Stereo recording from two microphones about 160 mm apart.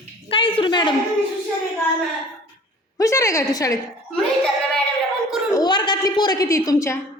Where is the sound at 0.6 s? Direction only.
30° left (ahead or behind).